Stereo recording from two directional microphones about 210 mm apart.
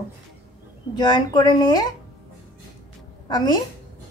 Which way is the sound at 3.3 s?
20° left (ahead or behind).